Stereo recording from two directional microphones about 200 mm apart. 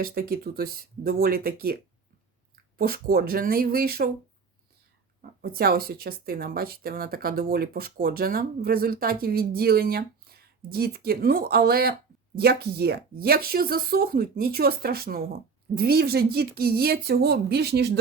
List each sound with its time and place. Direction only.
0.0 s speech: 50° right (ahead or behind)
5.4 s speech: 50° right (ahead or behind)